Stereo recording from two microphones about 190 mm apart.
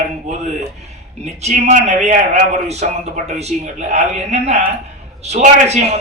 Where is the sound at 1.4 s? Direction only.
40° right (ahead or behind).